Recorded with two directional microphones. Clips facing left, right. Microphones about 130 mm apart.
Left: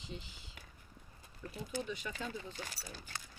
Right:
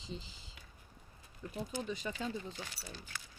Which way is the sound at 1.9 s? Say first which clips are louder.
Right 3 dB; 35° right (ahead or behind).